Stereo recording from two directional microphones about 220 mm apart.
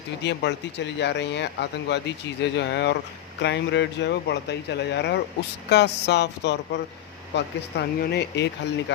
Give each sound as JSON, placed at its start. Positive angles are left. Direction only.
{"t": 0.2, "sound": "speech", "side_deg": 50}